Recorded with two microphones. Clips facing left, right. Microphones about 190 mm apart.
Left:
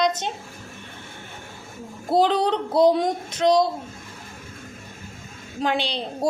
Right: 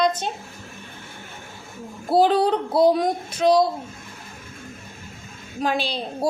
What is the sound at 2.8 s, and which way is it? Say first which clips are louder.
Speech: even; 20° left (ahead or behind).